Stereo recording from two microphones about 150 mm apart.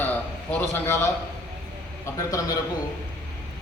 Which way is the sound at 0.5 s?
15° left (ahead or behind).